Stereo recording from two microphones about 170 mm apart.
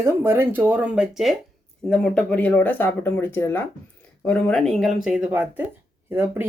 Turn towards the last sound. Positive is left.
turn(degrees=-15)  # may be behind; listen again after turning